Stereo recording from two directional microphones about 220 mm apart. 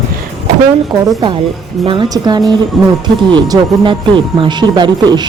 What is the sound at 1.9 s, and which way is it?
Speech, 20° right (ahead or behind).